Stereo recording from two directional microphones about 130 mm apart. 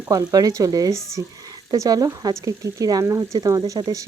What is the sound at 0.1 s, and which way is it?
Speech, 30° right (ahead or behind).